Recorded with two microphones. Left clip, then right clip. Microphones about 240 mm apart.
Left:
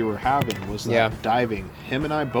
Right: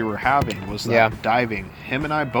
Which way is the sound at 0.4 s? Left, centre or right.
Centre.